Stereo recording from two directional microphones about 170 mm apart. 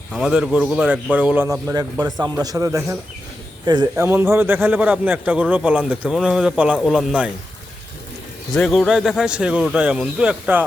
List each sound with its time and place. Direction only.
0.1 s a man's voice: centre (ahead or behind)
1.7 s a man's voice: 20° right (ahead or behind); by 7.3 s centre (ahead or behind)
8.5 s a man's voice: centre (ahead or behind)